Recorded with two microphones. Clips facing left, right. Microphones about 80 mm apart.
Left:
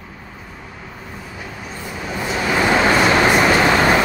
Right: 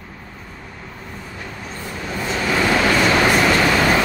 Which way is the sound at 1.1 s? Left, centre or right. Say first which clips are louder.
Even; centre.